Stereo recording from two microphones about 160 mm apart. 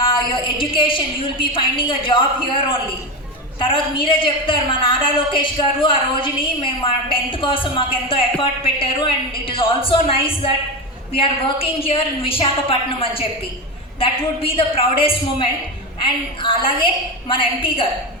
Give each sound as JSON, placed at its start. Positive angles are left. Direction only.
{"t": 0.1, "sound": "a woman's voice", "side_deg": 30}